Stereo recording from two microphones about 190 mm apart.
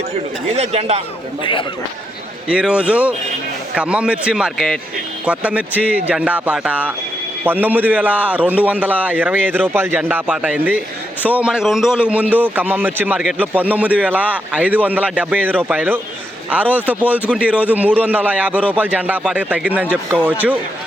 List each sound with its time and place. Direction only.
0.5 s a man's voice: 35° right (ahead or behind)
2.5 s a man's voice: 5° right (ahead or behind)